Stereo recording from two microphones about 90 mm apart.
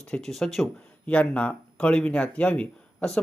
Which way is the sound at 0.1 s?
5° left (ahead or behind).